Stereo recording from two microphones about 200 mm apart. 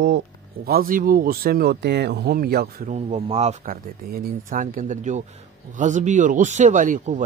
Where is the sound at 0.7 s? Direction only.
45° right (ahead or behind).